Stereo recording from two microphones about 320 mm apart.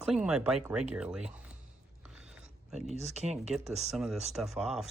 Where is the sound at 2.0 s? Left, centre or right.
Centre.